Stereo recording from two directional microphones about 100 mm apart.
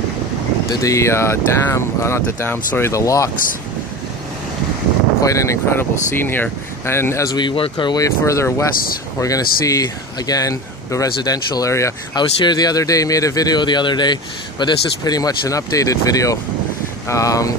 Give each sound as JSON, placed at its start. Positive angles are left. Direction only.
{"t": 0.7, "sound": "speech", "side_deg": 35}
{"t": 2.9, "sound": "speech", "side_deg": 35}
{"t": 5.2, "sound": "speech", "side_deg": 30}
{"t": 7.2, "sound": "speech", "side_deg": 50}
{"t": 7.7, "sound": "speech", "side_deg": 45}
{"t": 12.2, "sound": "speech", "side_deg": 45}